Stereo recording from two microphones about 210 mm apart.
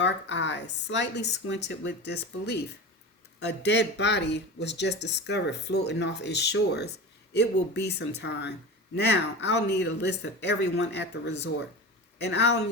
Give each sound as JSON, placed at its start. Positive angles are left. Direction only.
{"t": 0.0, "sound": "speech", "side_deg": 55}